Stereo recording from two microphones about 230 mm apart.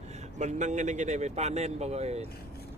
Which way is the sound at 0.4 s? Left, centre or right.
Right.